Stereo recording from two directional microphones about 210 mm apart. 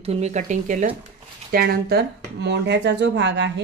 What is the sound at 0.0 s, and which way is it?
Speech, 30° right (ahead or behind).